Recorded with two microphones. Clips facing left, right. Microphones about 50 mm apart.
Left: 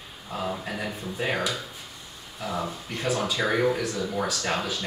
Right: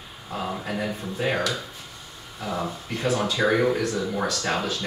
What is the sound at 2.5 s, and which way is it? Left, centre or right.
Speech, centre.